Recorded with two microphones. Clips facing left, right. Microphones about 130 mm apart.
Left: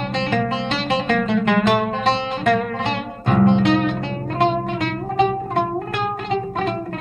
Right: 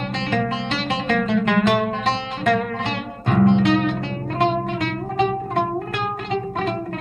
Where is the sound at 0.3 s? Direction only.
25° left (ahead or behind).